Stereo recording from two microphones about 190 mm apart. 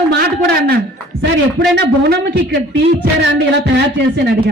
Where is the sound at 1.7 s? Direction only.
60° right (ahead or behind).